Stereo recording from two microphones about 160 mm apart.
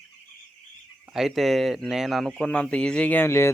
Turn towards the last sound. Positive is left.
turn(degrees=15)  # may be behind; listen again after turning